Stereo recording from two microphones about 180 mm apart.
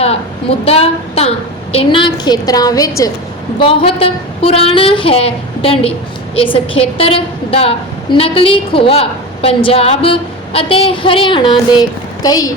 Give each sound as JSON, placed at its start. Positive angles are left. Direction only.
{"t": 0.6, "sound": "a woman's voice", "side_deg": 35}
{"t": 3.6, "sound": "a woman's voice", "side_deg": 30}